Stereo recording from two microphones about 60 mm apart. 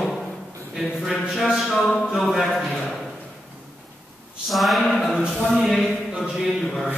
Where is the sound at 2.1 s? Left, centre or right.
Centre.